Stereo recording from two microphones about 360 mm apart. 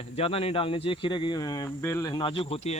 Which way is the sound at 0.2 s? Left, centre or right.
Centre.